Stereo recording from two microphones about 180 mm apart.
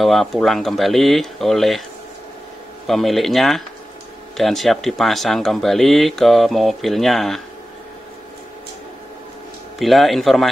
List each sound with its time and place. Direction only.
0.0 s speech: centre (ahead or behind)
2.9 s speech: centre (ahead or behind)
9.8 s speech: centre (ahead or behind)